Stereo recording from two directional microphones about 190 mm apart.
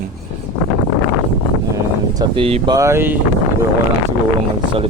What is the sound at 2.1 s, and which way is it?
Speech, 25° right (ahead or behind).